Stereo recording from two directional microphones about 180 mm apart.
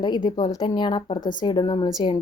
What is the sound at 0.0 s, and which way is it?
A woman's voice, 25° left (ahead or behind).